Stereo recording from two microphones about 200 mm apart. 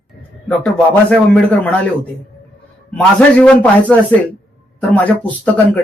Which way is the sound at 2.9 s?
5° left (ahead or behind).